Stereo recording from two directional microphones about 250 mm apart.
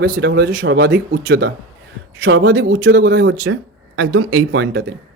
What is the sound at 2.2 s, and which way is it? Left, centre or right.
Speech, right.